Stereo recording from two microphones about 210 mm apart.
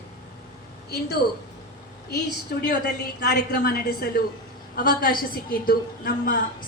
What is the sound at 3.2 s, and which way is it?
A woman's voice, 50° left (ahead or behind).